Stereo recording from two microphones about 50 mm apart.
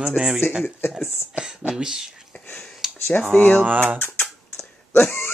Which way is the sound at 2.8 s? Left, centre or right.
Centre.